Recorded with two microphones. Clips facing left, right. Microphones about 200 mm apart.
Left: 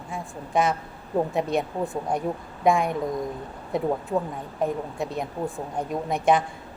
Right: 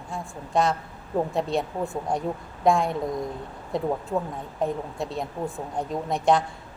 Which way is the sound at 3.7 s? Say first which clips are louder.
Left 1 dB; 5° left (ahead or behind).